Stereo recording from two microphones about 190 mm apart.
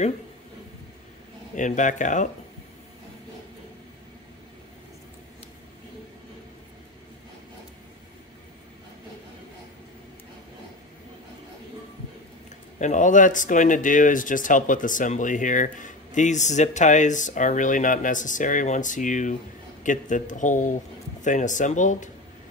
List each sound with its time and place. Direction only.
1.5 s speech: 40° left (ahead or behind)
12.7 s speech: 40° left (ahead or behind)